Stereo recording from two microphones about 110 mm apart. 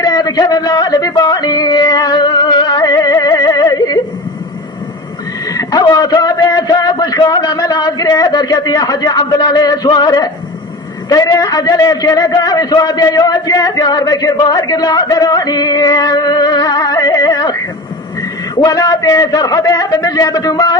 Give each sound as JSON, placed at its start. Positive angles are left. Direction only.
{"t": 0.0, "sound": "yodeling", "side_deg": 35}
{"t": 5.5, "sound": "a sound", "side_deg": 35}
{"t": 5.9, "sound": "a man's voice", "side_deg": 35}